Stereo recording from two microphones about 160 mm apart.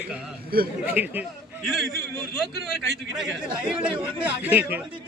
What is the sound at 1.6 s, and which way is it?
A man's voice, centre (ahead or behind).